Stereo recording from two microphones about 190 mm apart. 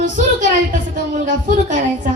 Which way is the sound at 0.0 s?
45° right (ahead or behind).